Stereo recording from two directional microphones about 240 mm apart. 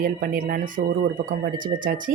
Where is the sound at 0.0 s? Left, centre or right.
Right.